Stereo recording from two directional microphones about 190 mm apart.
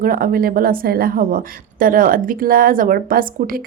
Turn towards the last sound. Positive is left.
turn(degrees=-50)  # may be behind; listen again after turning